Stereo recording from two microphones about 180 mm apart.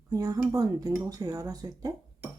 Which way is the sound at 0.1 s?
20° right (ahead or behind).